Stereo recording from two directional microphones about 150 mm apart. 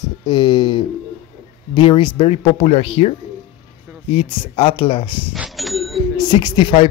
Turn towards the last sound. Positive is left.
turn(degrees=35)  # may be behind; listen again after turning